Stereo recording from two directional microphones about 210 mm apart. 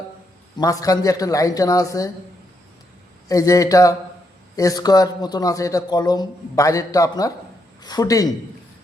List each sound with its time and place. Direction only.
0.6 s a man's voice: 15° left (ahead or behind)
3.2 s a man's voice: 15° left (ahead or behind)